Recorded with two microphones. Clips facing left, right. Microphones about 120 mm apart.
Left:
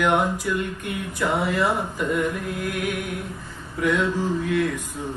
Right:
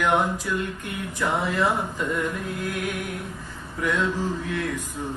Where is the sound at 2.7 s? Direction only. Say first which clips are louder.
Left 2 dB; 20° left (ahead or behind).